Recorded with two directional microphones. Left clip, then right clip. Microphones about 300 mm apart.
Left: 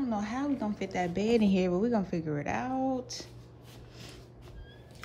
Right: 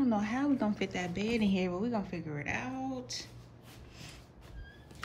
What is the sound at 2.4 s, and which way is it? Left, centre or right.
Speech, centre.